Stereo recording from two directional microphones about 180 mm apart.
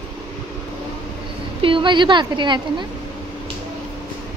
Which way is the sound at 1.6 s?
25° right (ahead or behind).